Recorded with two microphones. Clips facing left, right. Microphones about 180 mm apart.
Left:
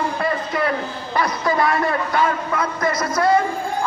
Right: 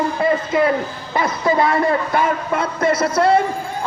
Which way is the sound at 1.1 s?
25° right (ahead or behind).